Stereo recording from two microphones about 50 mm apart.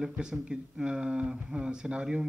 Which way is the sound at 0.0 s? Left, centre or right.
Centre.